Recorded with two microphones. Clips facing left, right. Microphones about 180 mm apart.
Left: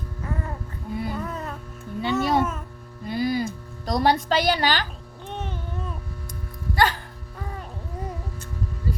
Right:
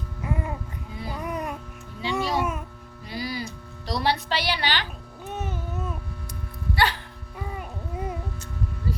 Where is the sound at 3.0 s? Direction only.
50° left (ahead or behind).